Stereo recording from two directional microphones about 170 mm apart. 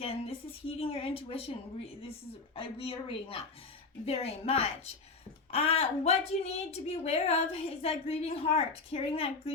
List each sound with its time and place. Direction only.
0.0 s a woman's voice: 35° left (ahead or behind)